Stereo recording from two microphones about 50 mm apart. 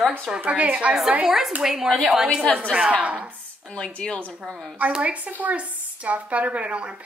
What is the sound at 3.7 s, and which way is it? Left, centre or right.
Speech, centre.